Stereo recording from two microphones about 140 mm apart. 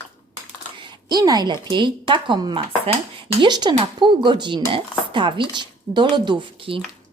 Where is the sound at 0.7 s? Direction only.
30° right (ahead or behind).